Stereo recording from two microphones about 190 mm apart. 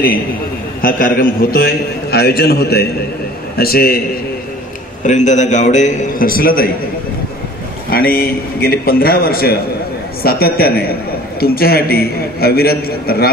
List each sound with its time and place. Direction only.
0.8 s a man's voice: 50° left (ahead or behind)
5.0 s a man's voice: 40° left (ahead or behind)
7.9 s a man's voice: 50° left (ahead or behind)